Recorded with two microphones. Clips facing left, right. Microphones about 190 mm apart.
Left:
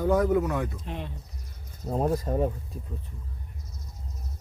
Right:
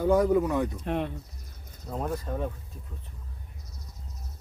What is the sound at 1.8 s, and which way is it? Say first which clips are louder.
Speech: left 6 dB; 35° left (ahead or behind).